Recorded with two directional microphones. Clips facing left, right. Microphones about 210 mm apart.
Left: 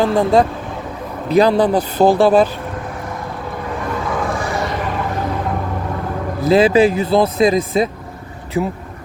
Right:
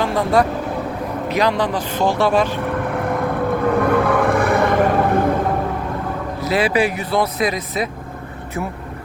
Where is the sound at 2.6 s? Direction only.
60° right (ahead or behind).